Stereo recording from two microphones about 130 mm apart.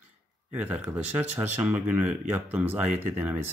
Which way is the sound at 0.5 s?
10° right (ahead or behind).